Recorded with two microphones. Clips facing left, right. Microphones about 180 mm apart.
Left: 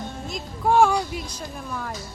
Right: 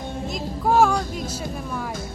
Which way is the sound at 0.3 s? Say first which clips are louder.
Even; centre (ahead or behind).